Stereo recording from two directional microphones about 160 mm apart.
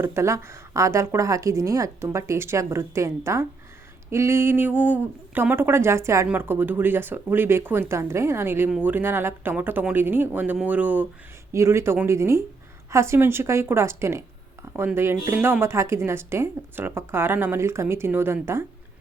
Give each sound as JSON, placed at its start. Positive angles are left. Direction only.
{"t": 0.0, "sound": "speech", "side_deg": -15}